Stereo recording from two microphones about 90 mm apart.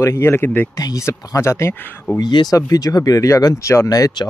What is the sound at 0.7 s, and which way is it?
Speech, 45° left (ahead or behind).